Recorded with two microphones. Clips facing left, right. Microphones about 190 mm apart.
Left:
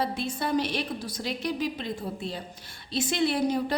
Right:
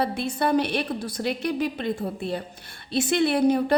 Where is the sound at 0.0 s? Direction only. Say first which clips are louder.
Right 5 dB; 65° right (ahead or behind).